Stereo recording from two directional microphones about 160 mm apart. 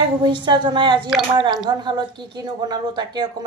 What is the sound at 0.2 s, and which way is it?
Speech, 30° right (ahead or behind).